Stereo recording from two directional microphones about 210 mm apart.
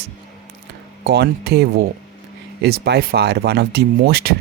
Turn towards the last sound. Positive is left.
turn(degrees=-50)  # may be behind; listen again after turning